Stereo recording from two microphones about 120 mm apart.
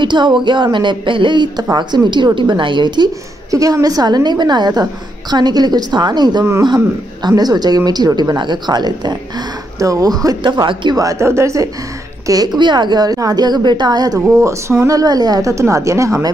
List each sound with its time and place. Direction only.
0.0 s speech: 40° right (ahead or behind)
3.5 s speech: 30° right (ahead or behind)